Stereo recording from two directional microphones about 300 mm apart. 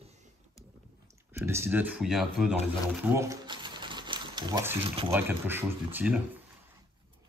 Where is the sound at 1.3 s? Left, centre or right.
Centre.